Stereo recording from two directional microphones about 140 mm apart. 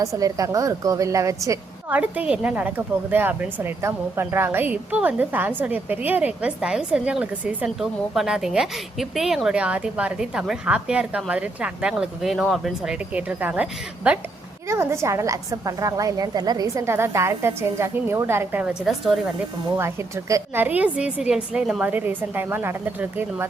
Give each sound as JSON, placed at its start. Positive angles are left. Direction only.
{"t": 0.0, "sound": "a woman's voice", "side_deg": -25}
{"t": 1.9, "sound": "a woman's voice", "side_deg": -10}
{"t": 19.7, "sound": "speech", "side_deg": -20}